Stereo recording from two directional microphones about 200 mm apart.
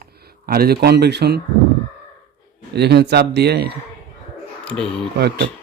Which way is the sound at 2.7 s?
55° right (ahead or behind).